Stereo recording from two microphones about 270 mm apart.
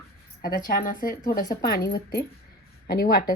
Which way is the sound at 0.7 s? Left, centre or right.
Left.